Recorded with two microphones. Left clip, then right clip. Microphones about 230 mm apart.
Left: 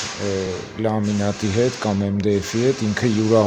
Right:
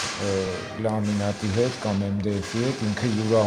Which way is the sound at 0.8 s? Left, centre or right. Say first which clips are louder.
Left 5 dB; left.